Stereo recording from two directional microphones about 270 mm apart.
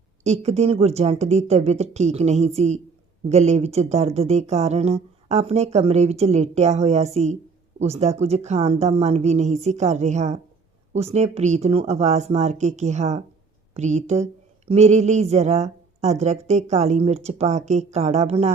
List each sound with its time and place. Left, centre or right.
0.3 s speech: right